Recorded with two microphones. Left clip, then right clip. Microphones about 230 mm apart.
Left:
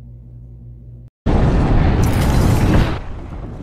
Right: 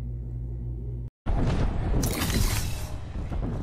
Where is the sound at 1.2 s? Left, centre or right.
Centre.